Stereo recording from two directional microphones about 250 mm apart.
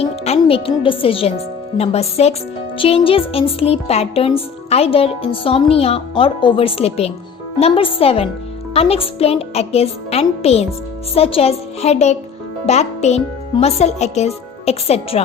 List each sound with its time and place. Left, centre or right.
0.0 s speech: left